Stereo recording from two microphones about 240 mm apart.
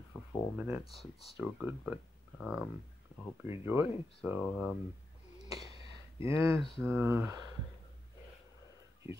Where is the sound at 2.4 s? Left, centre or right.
Centre.